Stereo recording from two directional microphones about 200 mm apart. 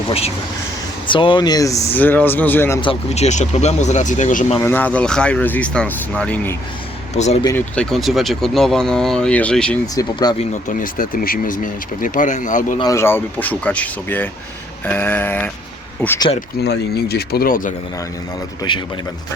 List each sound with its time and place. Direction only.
1.0 s speech: 25° left (ahead or behind)
2.8 s speech: 30° left (ahead or behind)
4.6 s speech: 10° left (ahead or behind)
7.1 s speech: 35° left (ahead or behind)
7.4 s speech: 10° left (ahead or behind)
9.8 s speech: 20° left (ahead or behind)
10.7 s speech: 40° left (ahead or behind)
12.8 s speech: 15° left (ahead or behind)
16.6 s speech: 55° left (ahead or behind)
18.7 s speech: 25° left (ahead or behind)